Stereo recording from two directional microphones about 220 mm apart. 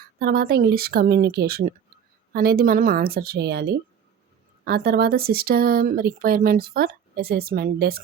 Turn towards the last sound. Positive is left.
turn(degrees=-45)  # may be behind; listen again after turning